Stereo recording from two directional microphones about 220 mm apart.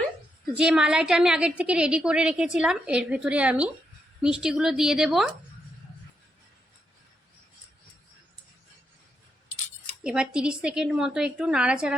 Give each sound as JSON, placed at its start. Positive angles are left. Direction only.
{"t": 0.5, "sound": "a woman's voice", "side_deg": -5}
{"t": 10.0, "sound": "a woman's voice", "side_deg": -5}